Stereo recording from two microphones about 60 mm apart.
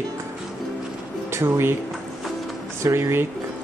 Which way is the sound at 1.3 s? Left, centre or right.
Right.